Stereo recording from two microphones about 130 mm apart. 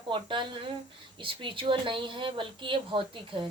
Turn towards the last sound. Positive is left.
turn(degrees=-40)  # may be behind; listen again after turning